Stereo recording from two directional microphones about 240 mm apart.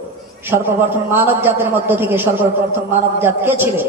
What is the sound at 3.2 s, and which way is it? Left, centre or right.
Speech, centre.